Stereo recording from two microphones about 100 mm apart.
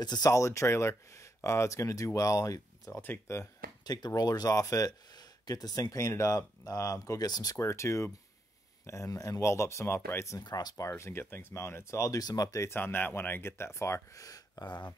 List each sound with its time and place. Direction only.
0.0 s speech: 40° left (ahead or behind)
2.9 s speech: 20° left (ahead or behind)
3.8 s speech: 40° left (ahead or behind)
7.5 s speech: 30° left (ahead or behind)
10.4 s speech: 40° left (ahead or behind)
11.0 s speech: 25° left (ahead or behind); by 15.0 s 45° left (ahead or behind)